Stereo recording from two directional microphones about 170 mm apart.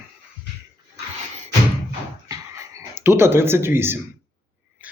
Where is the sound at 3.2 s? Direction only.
15° right (ahead or behind).